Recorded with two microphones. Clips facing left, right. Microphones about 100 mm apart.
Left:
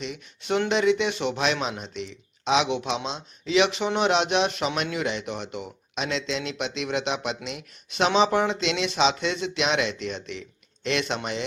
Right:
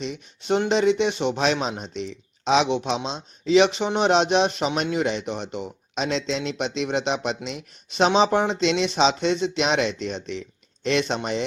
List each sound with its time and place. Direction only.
0.0 s speech: 30° right (ahead or behind)